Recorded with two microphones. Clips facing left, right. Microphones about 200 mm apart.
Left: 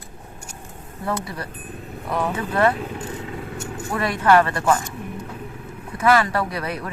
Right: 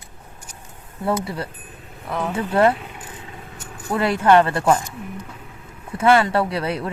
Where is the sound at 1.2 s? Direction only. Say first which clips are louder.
Right 3 dB; 25° right (ahead or behind).